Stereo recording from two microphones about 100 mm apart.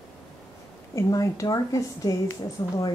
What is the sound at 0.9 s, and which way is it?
Speech, 30° left (ahead or behind).